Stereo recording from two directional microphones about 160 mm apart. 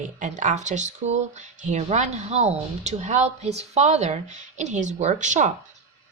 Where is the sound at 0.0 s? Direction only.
50° right (ahead or behind).